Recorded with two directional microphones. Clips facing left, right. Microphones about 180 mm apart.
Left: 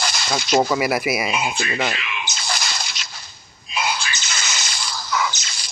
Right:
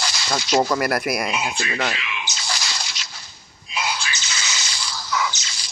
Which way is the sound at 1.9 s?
55° left (ahead or behind).